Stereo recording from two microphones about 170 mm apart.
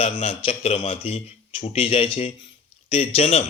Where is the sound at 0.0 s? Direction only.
40° left (ahead or behind).